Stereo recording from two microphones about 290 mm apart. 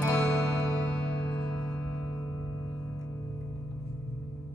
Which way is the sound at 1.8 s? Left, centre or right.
Right.